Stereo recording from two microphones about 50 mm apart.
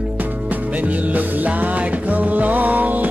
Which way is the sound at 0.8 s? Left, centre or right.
Right.